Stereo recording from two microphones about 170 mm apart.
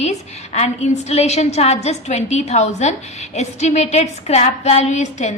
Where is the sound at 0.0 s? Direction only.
40° left (ahead or behind).